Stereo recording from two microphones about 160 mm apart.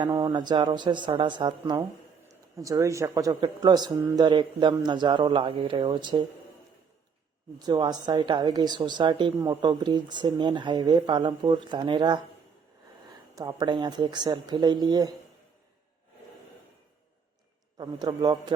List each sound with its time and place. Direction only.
0.0 s speech: 25° right (ahead or behind)
7.6 s speech: 25° right (ahead or behind)
13.3 s speech: 25° right (ahead or behind)
17.7 s speech: 25° right (ahead or behind)